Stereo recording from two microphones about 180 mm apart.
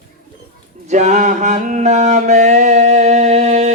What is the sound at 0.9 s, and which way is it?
Mantra, 40° right (ahead or behind).